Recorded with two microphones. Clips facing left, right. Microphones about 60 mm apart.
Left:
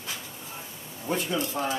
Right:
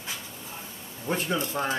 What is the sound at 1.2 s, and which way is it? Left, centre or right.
Speech, right.